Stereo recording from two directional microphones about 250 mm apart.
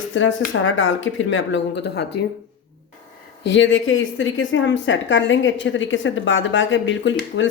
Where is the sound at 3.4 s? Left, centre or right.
Left.